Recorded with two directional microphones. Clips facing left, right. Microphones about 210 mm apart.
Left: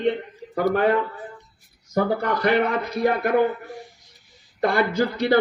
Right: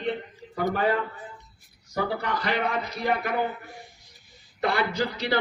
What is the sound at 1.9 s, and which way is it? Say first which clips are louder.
A man's voice: left 6 dB; 50° left (ahead or behind).